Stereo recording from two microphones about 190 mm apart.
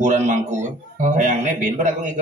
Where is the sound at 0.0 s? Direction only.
40° right (ahead or behind).